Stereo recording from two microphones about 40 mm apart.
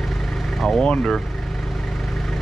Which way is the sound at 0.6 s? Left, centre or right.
Left.